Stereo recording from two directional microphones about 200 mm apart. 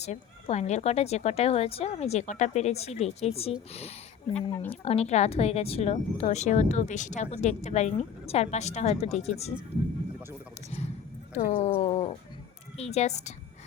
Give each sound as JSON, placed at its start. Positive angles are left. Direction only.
{"t": 0.0, "sound": "speech", "side_deg": 35}
{"t": 4.4, "sound": "speech", "side_deg": 15}
{"t": 4.7, "sound": "speech", "side_deg": 30}
{"t": 11.3, "sound": "speech", "side_deg": 30}